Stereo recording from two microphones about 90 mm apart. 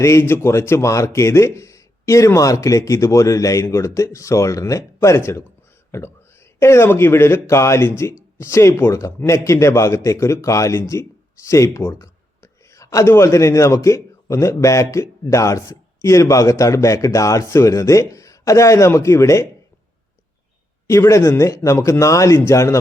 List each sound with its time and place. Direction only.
0.0 s speech: 30° left (ahead or behind)
6.6 s speech: 30° left (ahead or behind)
20.8 s speech: 30° left (ahead or behind)